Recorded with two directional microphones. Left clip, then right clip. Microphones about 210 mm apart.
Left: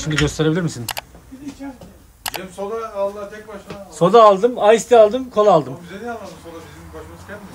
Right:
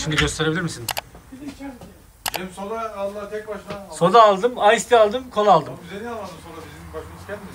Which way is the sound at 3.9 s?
30° left (ahead or behind).